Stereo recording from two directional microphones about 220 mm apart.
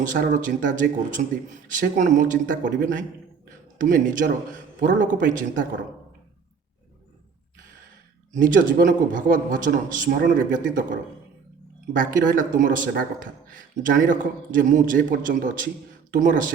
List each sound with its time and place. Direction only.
0.0 s a man's voice: 35° right (ahead or behind)
8.3 s a man's voice: 35° right (ahead or behind)